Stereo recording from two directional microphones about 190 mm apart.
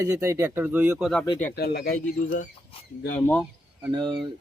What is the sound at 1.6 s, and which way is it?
Speech, 55° left (ahead or behind).